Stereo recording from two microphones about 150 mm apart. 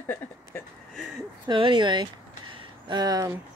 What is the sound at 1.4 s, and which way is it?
Speech, 35° right (ahead or behind).